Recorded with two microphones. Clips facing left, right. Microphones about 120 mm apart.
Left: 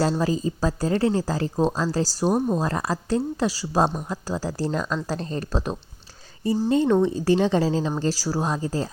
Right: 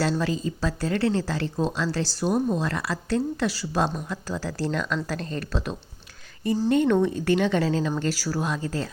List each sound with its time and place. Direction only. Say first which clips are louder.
0.0 s speech: left 3 dB; 35° left (ahead or behind)